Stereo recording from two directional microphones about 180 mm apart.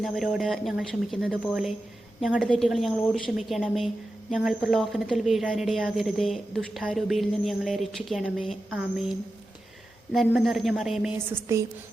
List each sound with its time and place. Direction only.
0.0 s a woman's voice: centre (ahead or behind)